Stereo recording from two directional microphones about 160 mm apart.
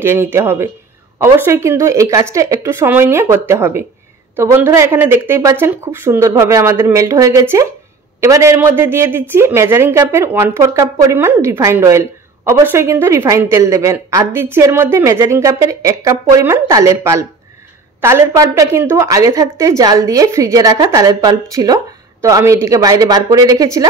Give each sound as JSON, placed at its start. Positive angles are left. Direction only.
{"t": 0.0, "sound": "a woman's voice", "side_deg": -15}